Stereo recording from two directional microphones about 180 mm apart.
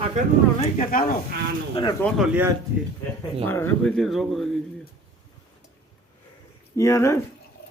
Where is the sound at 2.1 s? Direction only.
5° right (ahead or behind).